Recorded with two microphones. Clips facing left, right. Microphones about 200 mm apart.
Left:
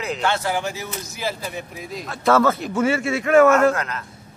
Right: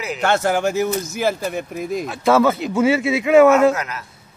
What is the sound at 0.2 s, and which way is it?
Speech, 50° right (ahead or behind).